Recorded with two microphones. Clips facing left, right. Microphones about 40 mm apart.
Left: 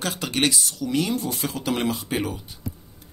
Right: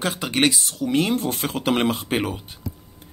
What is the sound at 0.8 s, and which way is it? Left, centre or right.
Speech, right.